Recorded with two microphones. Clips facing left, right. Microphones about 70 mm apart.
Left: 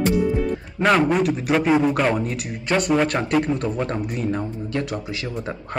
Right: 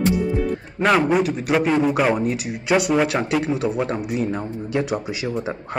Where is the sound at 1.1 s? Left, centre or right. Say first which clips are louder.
Right 1 dB; centre.